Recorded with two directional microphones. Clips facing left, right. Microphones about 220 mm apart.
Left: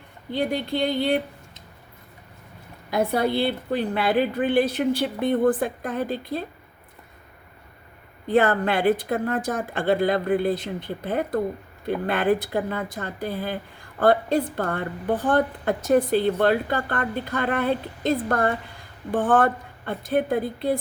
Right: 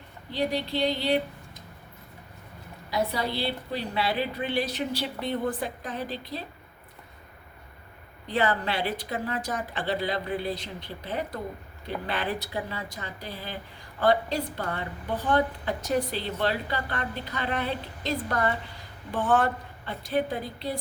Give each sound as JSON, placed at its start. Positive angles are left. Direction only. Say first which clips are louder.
{"t": 0.3, "sound": "a woman's voice", "louder": "left 3 dB", "side_deg": 50}
{"t": 2.9, "sound": "a woman's voice", "louder": "left 6 dB", "side_deg": 55}
{"t": 8.3, "sound": "a woman's voice", "louder": "left 7 dB", "side_deg": 50}